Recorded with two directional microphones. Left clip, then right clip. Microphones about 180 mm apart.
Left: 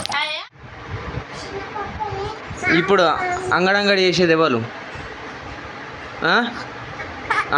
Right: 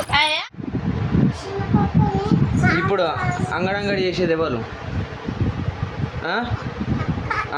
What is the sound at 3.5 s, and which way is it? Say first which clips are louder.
Speech: left 7 dB; 40° left (ahead or behind).